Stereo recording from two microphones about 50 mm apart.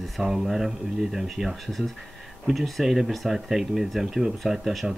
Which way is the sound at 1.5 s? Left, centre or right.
Centre.